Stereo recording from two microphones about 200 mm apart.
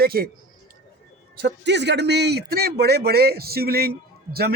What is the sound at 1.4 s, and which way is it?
Speech, 60° right (ahead or behind).